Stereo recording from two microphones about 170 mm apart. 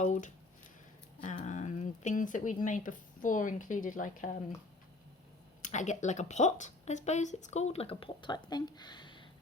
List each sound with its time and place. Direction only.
0.0 s speech: 45° left (ahead or behind)
1.5 s speech: 45° left (ahead or behind)
5.6 s speech: 45° left (ahead or behind); by 9.2 s 25° left (ahead or behind)